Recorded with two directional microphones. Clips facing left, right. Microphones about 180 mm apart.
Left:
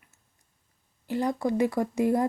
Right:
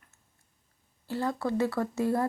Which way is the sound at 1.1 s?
15° left (ahead or behind).